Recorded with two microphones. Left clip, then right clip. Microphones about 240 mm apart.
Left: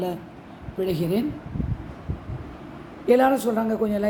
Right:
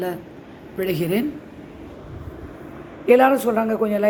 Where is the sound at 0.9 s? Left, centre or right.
Centre.